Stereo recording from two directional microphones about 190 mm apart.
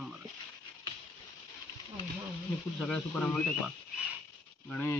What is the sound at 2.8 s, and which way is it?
Speech, 5° left (ahead or behind).